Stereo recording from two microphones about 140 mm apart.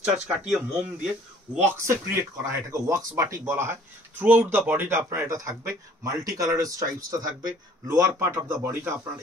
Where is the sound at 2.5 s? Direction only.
20° right (ahead or behind).